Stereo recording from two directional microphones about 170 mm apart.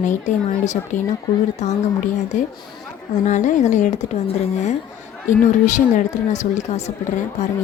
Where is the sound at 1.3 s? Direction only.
20° left (ahead or behind).